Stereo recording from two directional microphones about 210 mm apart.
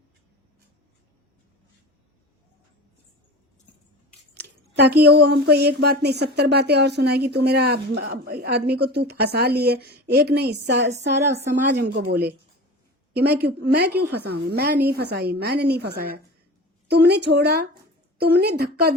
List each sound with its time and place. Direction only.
4.4 s speech: 50° right (ahead or behind)
13.1 s speech: 50° right (ahead or behind)